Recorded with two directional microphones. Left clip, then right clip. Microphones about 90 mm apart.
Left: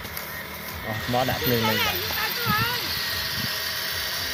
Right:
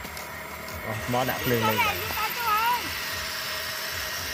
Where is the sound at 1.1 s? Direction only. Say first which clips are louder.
Left 2 dB; 30° right (ahead or behind).